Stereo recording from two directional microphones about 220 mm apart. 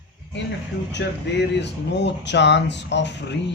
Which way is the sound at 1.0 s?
55° left (ahead or behind).